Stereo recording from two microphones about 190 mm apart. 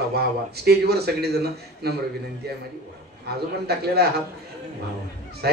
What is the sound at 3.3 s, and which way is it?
Speech, 60° right (ahead or behind).